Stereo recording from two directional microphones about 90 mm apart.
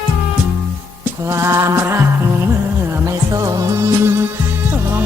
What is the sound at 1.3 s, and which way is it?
Music, 35° right (ahead or behind).